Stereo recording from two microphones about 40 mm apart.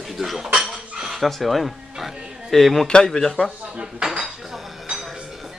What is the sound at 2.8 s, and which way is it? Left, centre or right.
Speech, centre.